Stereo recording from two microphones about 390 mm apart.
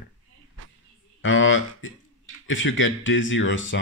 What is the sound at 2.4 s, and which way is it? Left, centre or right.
Speech, left.